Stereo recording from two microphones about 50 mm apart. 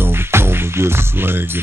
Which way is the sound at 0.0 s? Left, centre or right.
Right.